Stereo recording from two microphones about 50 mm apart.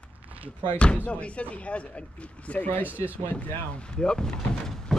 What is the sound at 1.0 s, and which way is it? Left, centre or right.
Speech, left.